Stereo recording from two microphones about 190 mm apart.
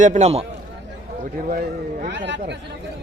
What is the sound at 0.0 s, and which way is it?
Speech, 40° right (ahead or behind).